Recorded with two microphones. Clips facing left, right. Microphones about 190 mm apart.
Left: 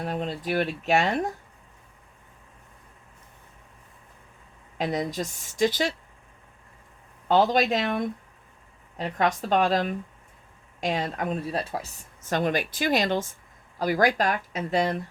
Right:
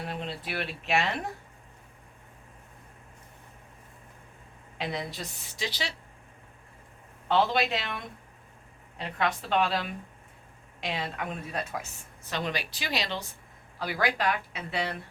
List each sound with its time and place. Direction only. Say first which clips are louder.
0.0 s a woman's voice: left 6 dB; 45° left (ahead or behind)
4.8 s a woman's voice: left 7 dB; 45° left (ahead or behind)
7.3 s a woman's voice: left 4 dB; 40° left (ahead or behind)